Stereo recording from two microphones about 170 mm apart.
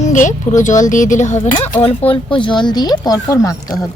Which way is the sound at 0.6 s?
45° left (ahead or behind).